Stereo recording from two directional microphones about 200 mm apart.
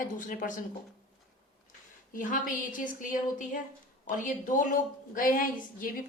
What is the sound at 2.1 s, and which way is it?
A woman's voice, 40° left (ahead or behind).